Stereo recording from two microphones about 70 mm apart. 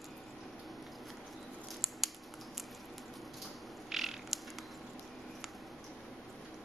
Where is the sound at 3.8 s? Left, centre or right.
Centre.